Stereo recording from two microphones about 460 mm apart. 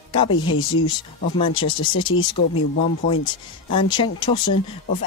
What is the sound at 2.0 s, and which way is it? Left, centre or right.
Speech, centre.